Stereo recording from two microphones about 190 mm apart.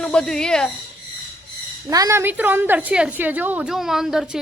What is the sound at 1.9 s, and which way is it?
A woman's voice, 15° right (ahead or behind).